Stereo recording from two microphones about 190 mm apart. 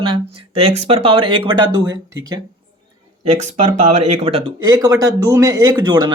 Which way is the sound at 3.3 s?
40° right (ahead or behind).